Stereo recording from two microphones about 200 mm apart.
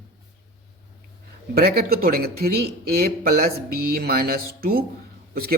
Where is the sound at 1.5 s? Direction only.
50° right (ahead or behind).